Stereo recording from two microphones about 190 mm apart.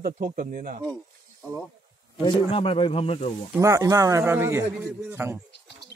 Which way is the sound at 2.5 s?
30° left (ahead or behind).